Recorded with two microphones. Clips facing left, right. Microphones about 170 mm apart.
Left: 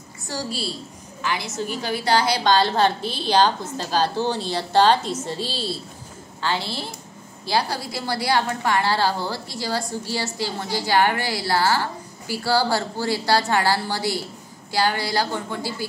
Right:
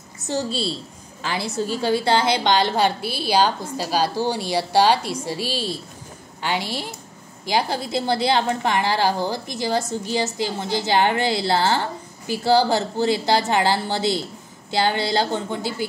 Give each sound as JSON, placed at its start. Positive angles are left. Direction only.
{"t": 0.3, "sound": "a woman's voice", "side_deg": -25}